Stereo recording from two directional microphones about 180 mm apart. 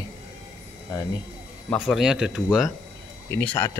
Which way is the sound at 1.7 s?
Centre (ahead or behind).